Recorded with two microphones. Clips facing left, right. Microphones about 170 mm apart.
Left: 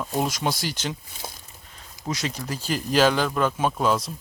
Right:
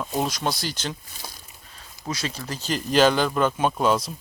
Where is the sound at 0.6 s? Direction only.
15° left (ahead or behind); by 4.1 s centre (ahead or behind).